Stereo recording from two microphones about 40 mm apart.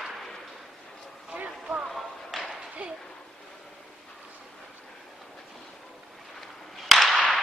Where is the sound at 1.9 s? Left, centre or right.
Centre.